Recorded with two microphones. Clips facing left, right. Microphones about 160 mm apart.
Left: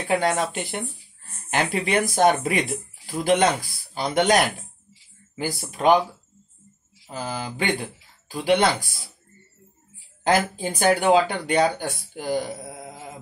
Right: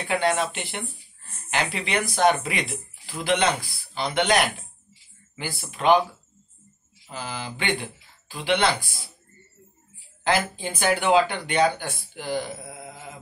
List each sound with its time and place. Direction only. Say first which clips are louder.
0.1 s speech: left 1 dB; 40° left (ahead or behind)
7.1 s speech: left 3 dB; 40° left (ahead or behind)
10.2 s speech: left 3 dB; 45° left (ahead or behind)